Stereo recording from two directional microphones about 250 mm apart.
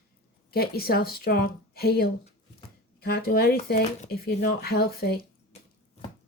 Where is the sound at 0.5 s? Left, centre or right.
Left.